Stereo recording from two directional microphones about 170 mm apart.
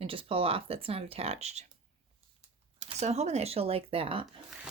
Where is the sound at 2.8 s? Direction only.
40° right (ahead or behind).